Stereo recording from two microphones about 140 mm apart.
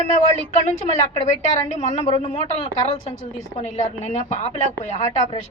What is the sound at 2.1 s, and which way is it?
A woman's voice, 40° left (ahead or behind).